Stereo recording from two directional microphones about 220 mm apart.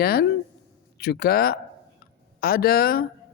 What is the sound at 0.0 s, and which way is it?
A man's voice, 45° left (ahead or behind).